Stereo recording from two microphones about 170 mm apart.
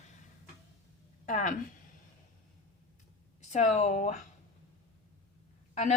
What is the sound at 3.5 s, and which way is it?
Speech, 45° left (ahead or behind).